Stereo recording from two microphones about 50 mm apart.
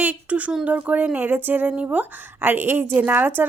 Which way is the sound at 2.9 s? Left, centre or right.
Right.